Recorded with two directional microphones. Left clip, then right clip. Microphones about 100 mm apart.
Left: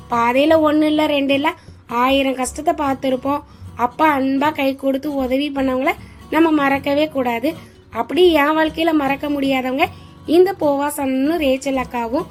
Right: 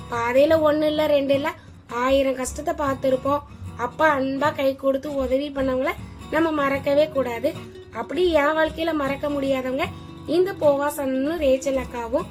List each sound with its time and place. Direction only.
0.1 s a woman's voice: 40° left (ahead or behind)
4.2 s a woman's voice: 25° left (ahead or behind)
4.4 s a woman's voice: 35° left (ahead or behind)